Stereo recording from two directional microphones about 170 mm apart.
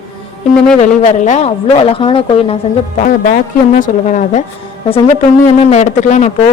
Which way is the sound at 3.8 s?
50° left (ahead or behind).